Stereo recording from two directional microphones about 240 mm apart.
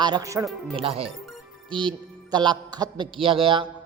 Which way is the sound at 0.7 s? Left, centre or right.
Right.